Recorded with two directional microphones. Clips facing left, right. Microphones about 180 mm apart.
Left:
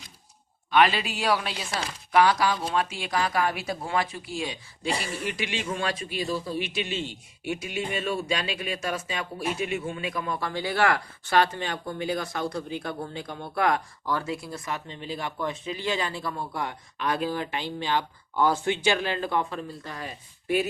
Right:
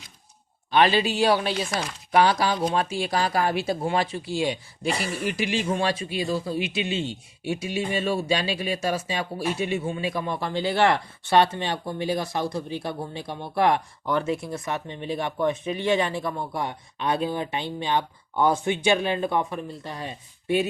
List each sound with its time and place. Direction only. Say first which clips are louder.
0.7 s speech: right 2 dB; 30° right (ahead or behind)